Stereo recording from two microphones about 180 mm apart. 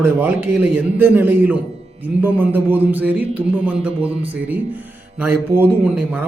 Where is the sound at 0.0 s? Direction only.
10° right (ahead or behind).